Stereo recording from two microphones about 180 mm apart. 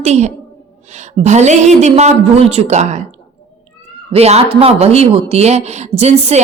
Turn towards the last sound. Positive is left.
turn(degrees=-40)  # may be behind; listen again after turning